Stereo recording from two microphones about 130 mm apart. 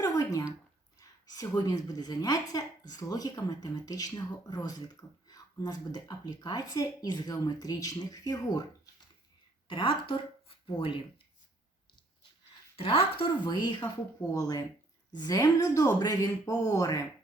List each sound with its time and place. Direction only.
0.0 s a sound: 25° left (ahead or behind)
0.9 s a woman's voice: 30° left (ahead or behind)
9.6 s speech: 40° left (ahead or behind)
12.7 s a woman's voice: 45° left (ahead or behind); by 17.0 s 25° left (ahead or behind)